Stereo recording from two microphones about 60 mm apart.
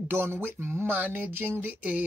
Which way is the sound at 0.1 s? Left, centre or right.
Right.